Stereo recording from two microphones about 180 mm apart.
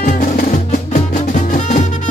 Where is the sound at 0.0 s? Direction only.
50° left (ahead or behind).